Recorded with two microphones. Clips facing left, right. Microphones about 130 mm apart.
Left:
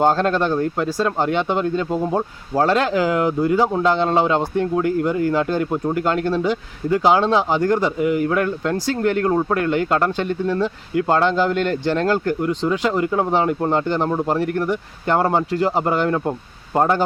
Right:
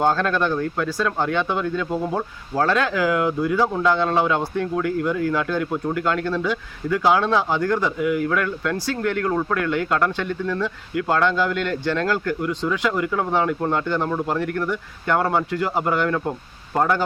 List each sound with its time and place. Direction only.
0.0 s speech: 25° left (ahead or behind)
3.6 s speech: 25° left (ahead or behind)
6.1 s speech: 20° left (ahead or behind)